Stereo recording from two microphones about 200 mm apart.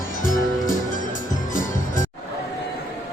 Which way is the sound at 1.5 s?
40° left (ahead or behind).